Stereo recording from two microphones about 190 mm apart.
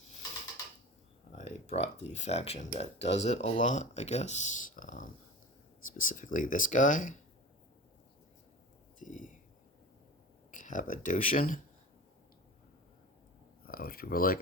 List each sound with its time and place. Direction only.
1.4 s speech: 35° left (ahead or behind)
9.0 s a sound: 45° left (ahead or behind)
10.5 s speech: 45° left (ahead or behind)
13.7 s speech: 50° left (ahead or behind)